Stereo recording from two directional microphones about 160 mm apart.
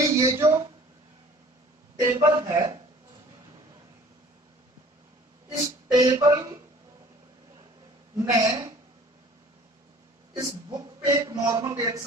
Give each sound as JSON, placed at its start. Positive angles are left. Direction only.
{"t": 0.0, "sound": "a sound", "side_deg": -20}
{"t": 2.0, "sound": "speech", "side_deg": -20}
{"t": 5.5, "sound": "speech", "side_deg": -25}
{"t": 8.2, "sound": "speech", "side_deg": -20}
{"t": 10.3, "sound": "speech", "side_deg": -20}